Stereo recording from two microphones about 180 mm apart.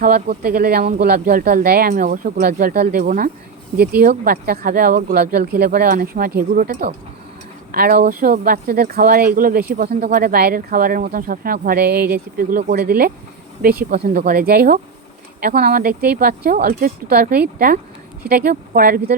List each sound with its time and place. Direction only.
0.0 s speech: 50° right (ahead or behind)
13.9 s speech: 40° right (ahead or behind)
14.3 s speech: 55° right (ahead or behind)